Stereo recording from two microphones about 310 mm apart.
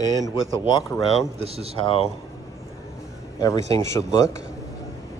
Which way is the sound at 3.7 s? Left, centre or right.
Centre.